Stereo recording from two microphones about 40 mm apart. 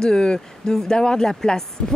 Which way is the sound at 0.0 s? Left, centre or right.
Centre.